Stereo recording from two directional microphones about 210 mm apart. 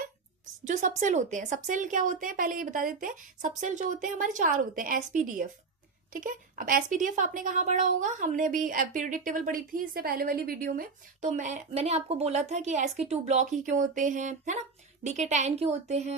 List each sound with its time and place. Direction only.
0.6 s speech: 35° right (ahead or behind)
6.1 s speech: 40° right (ahead or behind)